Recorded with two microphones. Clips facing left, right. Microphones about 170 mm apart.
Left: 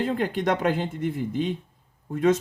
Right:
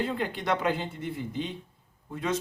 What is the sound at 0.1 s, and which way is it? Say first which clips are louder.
Speech: left 5 dB; 45° left (ahead or behind).